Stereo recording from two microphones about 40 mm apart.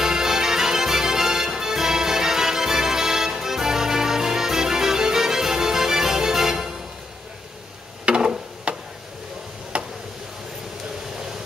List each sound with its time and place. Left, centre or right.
0.0 s music: centre
8.0 s a sound: right
9.7 s tick: right